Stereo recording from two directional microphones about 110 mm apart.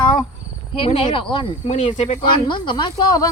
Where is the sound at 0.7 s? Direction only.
55° left (ahead or behind).